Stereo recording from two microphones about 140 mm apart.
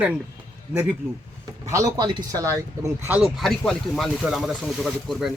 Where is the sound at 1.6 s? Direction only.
25° right (ahead or behind).